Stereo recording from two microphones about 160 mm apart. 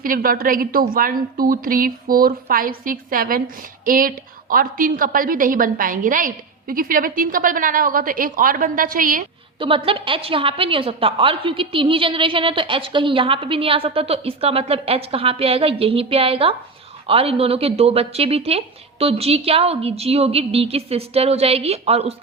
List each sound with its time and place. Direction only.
0.0 s a woman's voice: 65° right (ahead or behind)
9.6 s a woman's voice: 35° right (ahead or behind)